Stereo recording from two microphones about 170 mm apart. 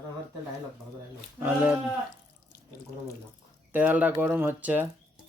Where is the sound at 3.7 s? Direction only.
10° right (ahead or behind).